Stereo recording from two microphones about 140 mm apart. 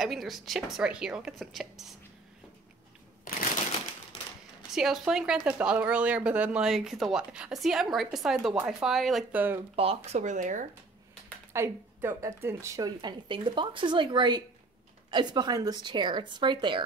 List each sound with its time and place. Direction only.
0.0 s speech: centre (ahead or behind)
4.6 s speech: centre (ahead or behind)
9.3 s speech: 15° right (ahead or behind)
9.8 s speech: 45° right (ahead or behind); by 10.7 s 65° right (ahead or behind)
11.5 s a woman's voice: 20° right (ahead or behind); by 16.8 s 35° right (ahead or behind)